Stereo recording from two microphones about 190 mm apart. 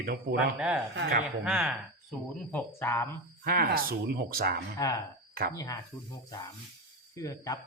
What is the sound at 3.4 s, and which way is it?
Speech, 55° right (ahead or behind).